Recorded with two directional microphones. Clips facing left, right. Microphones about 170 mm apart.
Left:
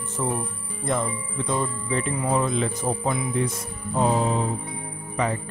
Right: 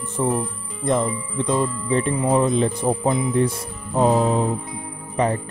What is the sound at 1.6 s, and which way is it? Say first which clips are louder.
Speech: right 5 dB; 35° right (ahead or behind).